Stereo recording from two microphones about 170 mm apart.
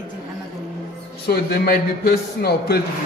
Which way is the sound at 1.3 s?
70° left (ahead or behind).